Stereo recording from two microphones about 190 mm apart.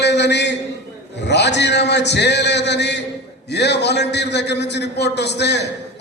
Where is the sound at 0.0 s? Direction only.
65° left (ahead or behind).